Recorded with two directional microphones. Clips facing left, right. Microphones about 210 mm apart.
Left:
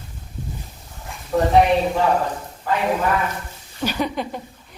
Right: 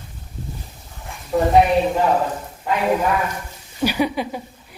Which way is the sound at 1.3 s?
5° right (ahead or behind).